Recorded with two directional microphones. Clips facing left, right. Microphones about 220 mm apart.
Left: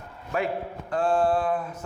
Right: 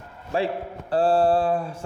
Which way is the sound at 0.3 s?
30° right (ahead or behind).